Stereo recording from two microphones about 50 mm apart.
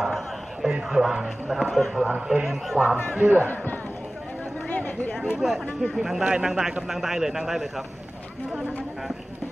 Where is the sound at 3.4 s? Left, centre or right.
Left.